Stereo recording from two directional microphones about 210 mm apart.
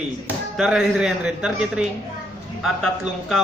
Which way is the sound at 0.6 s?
Centre (ahead or behind).